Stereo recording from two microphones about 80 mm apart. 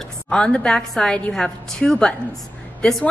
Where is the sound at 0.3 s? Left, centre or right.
Centre.